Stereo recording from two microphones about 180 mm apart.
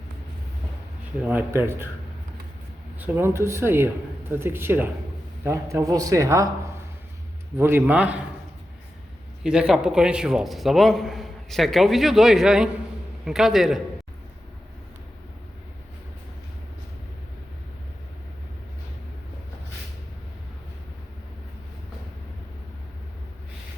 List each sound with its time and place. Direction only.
1.2 s speech: 10° right (ahead or behind)
3.0 s speech: 10° right (ahead or behind)
7.6 s speech: 10° right (ahead or behind)
9.4 s a man's voice: 5° right (ahead or behind)